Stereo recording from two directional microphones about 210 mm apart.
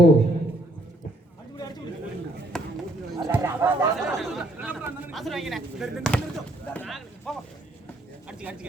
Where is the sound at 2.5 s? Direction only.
Centre (ahead or behind).